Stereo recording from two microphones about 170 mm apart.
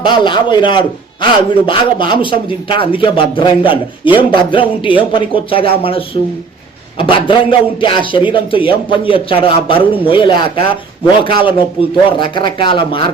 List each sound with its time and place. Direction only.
0.0 s a man's voice: 25° left (ahead or behind)